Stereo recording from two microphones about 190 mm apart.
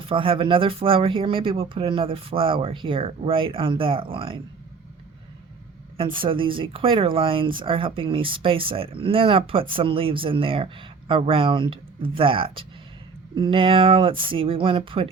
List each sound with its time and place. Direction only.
0.1 s speech: 30° right (ahead or behind)
6.1 s speech: 25° right (ahead or behind)